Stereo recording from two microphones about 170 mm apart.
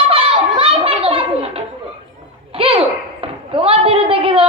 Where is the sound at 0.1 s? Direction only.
35° right (ahead or behind).